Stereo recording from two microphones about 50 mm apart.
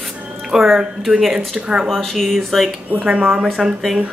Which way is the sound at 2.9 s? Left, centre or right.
Right.